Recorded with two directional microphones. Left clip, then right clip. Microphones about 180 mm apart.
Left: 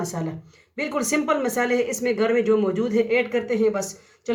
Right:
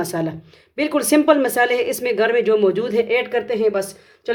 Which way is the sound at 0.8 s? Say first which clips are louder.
Right 7 dB; 45° right (ahead or behind).